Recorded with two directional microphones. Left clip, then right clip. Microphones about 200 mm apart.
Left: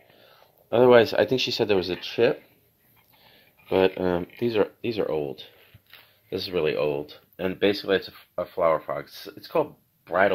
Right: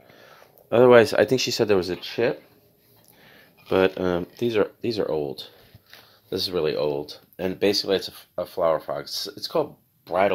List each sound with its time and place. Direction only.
0.1 s speech: 25° right (ahead or behind)
2.0 s speech: centre (ahead or behind)
3.3 s speech: 15° right (ahead or behind)